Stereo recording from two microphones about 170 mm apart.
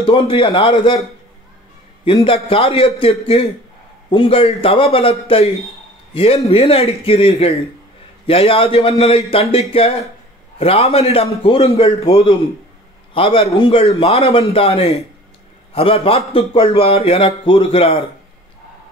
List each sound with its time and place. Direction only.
0.0 s a man's voice: 30° left (ahead or behind)
2.2 s a man's voice: 35° left (ahead or behind)